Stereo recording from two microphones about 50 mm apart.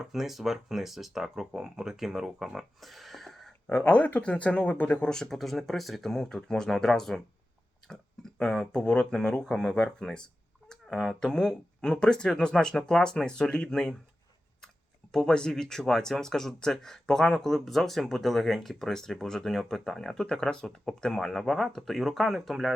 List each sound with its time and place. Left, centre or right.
0.0 s speech: centre
3.8 s speech: left
5.0 s speech: centre
7.9 s tick-tock: centre
8.7 s speech: centre
15.1 s speech: centre